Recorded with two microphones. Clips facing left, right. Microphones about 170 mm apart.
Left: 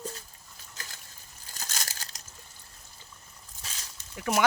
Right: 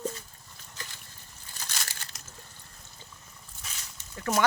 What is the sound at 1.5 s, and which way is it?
Crumpling, 40° left (ahead or behind).